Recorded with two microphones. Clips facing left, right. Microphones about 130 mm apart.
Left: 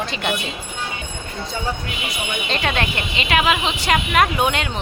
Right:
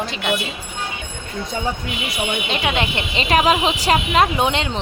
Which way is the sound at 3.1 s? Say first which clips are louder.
Right 3 dB; 35° right (ahead or behind).